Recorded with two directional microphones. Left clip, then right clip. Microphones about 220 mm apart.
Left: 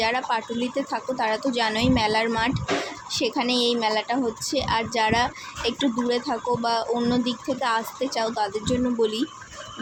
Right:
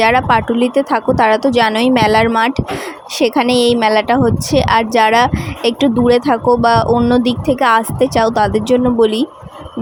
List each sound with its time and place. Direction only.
0.0 s speech: 35° right (ahead or behind)